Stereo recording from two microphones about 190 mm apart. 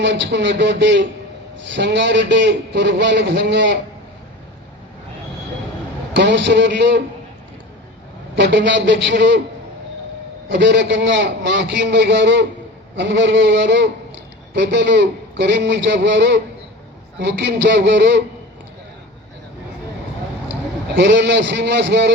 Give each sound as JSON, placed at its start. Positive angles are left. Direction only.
{"t": 0.0, "sound": "a man's voice", "side_deg": -65}
{"t": 6.1, "sound": "a man's voice", "side_deg": -65}
{"t": 8.4, "sound": "a man's voice", "side_deg": -65}
{"t": 10.5, "sound": "a man's voice", "side_deg": -65}
{"t": 20.5, "sound": "a man's voice", "side_deg": -65}